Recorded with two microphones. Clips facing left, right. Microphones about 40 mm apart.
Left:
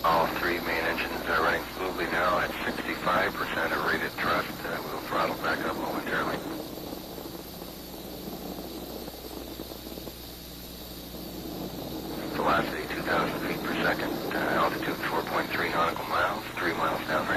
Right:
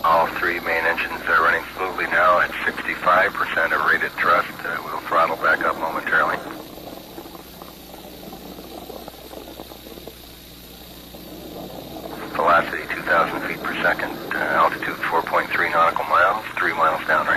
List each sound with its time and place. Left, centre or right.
0.1 s speech: right
12.1 s vehicle: right
14.3 s speech: right